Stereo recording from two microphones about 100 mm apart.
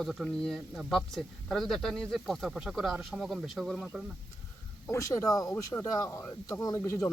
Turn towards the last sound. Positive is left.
turn(degrees=30)  # may be behind; listen again after turning